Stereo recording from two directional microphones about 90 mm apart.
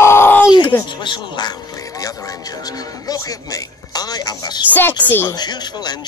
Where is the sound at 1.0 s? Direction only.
60° left (ahead or behind).